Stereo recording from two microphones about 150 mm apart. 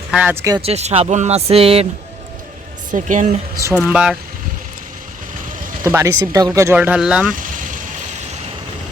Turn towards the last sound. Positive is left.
turn(degrees=-60)  # may be behind; listen again after turning